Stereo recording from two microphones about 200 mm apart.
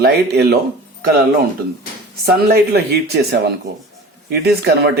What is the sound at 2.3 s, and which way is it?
Speech, 55° right (ahead or behind).